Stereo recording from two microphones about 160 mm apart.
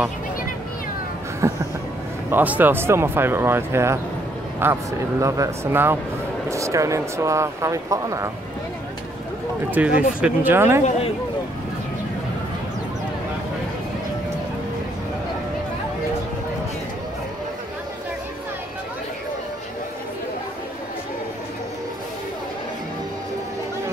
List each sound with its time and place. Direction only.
1.4 s speech: 15° right (ahead or behind)
9.7 s speech: 10° right (ahead or behind)